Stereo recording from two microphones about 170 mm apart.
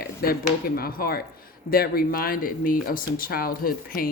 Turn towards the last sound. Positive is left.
turn(degrees=60)  # may be behind; listen again after turning